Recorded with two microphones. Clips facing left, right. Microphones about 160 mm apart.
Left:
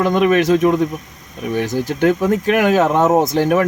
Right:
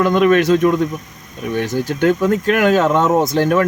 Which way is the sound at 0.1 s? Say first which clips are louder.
Right 1 dB; 40° left (ahead or behind).